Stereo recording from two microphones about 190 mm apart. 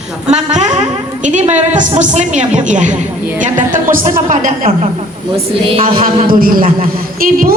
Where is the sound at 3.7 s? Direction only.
45° right (ahead or behind).